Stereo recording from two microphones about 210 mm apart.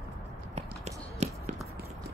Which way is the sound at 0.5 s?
30° right (ahead or behind).